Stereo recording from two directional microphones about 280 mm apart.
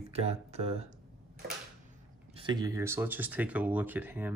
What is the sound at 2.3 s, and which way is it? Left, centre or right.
Speech, centre.